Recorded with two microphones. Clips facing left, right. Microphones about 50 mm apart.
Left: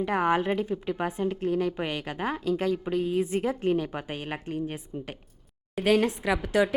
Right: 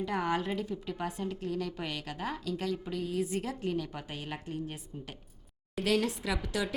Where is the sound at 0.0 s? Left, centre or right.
Left.